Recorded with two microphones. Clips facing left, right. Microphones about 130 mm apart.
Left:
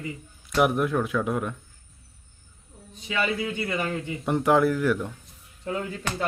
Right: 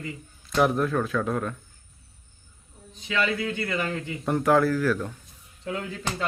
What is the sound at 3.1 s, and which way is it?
A man's voice, 20° left (ahead or behind).